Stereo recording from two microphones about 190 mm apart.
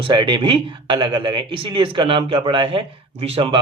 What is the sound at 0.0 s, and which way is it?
Speech, 25° right (ahead or behind).